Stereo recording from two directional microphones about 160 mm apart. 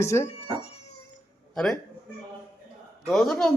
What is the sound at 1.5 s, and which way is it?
Speech, 5° left (ahead or behind).